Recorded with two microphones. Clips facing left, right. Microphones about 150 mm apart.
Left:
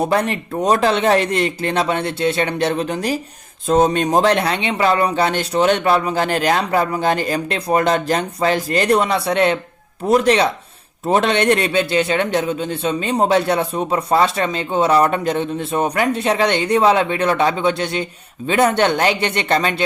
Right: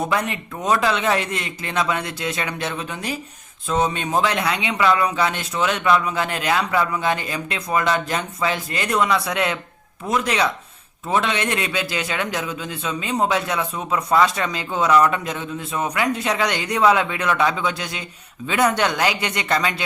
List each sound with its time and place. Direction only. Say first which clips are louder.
0.0 s speech: left 5 dB; 35° left (ahead or behind)